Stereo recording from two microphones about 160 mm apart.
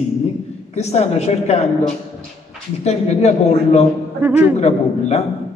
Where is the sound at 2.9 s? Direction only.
45° left (ahead or behind).